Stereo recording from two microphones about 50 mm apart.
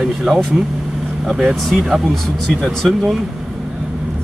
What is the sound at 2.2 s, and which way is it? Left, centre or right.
Speech, centre.